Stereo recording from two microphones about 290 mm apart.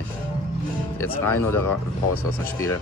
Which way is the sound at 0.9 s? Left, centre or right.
Centre.